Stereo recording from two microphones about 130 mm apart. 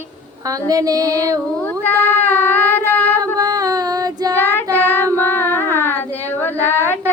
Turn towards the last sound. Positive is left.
turn(degrees=15)  # may be behind; listen again after turning